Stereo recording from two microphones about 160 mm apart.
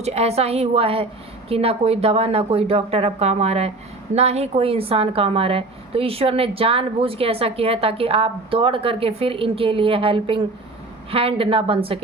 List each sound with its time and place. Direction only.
0.0 s a woman's voice: 40° right (ahead or behind)